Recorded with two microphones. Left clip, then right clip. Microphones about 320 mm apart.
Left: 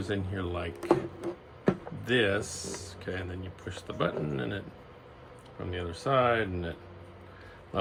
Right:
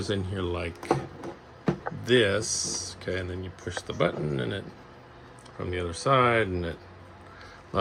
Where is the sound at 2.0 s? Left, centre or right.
Centre.